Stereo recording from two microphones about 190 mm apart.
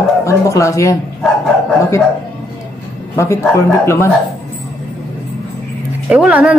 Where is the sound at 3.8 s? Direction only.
15° left (ahead or behind).